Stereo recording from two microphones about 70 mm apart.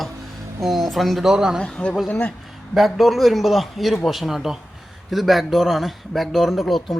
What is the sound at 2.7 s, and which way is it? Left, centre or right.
Speech, centre.